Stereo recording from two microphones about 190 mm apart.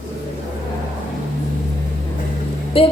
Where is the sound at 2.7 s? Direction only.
30° left (ahead or behind).